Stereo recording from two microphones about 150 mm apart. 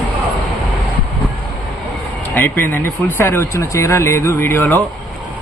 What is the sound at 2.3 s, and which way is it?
Speech, 15° left (ahead or behind).